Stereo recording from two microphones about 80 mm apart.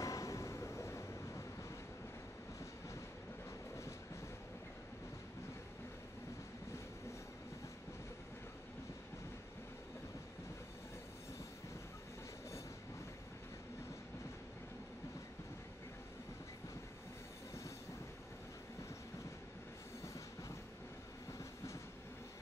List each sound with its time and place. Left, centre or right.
0.0 s vehicle: left
21.3 s train: left